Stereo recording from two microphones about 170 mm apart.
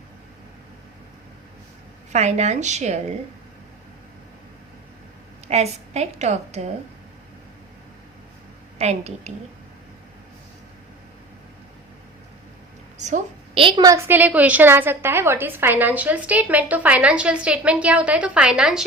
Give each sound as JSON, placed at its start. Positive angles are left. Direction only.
{"t": 2.1, "sound": "a woman's voice", "side_deg": -40}
{"t": 5.5, "sound": "a woman's voice", "side_deg": -40}
{"t": 8.8, "sound": "a woman's voice", "side_deg": -40}
{"t": 13.0, "sound": "a woman's voice", "side_deg": -45}